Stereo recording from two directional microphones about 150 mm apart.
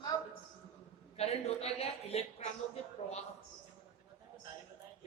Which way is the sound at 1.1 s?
45° left (ahead or behind).